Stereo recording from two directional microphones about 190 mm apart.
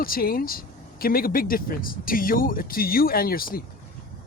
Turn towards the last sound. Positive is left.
turn(degrees=50)  # may be behind; listen again after turning